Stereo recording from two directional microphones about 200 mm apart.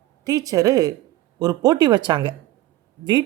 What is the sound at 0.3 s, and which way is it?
Speech, 20° right (ahead or behind).